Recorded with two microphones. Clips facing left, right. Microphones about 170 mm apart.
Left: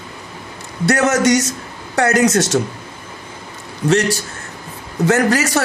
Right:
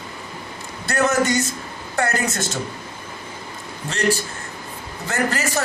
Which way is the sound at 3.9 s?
80° left.